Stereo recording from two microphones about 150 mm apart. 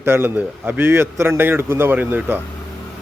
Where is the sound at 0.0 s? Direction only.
15° right (ahead or behind).